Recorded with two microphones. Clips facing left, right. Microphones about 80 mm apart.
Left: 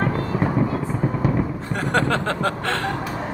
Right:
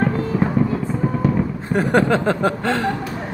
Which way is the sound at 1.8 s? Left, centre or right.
Centre.